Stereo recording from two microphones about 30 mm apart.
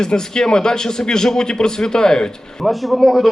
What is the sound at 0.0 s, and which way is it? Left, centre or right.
Speech, left.